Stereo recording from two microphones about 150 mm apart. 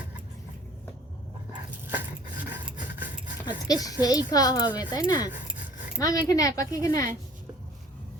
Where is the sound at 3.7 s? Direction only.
25° left (ahead or behind).